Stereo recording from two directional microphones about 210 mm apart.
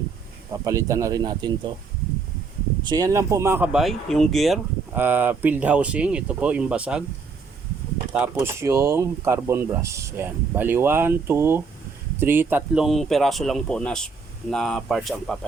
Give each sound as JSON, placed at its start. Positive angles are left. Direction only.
{"t": 0.6, "sound": "speech", "side_deg": -15}
{"t": 2.8, "sound": "speech", "side_deg": -15}
{"t": 8.1, "sound": "speech", "side_deg": -10}